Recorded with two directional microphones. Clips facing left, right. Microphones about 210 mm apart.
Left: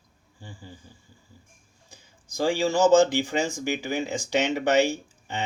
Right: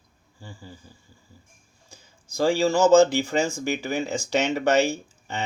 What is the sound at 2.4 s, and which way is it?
Speech, 15° left (ahead or behind).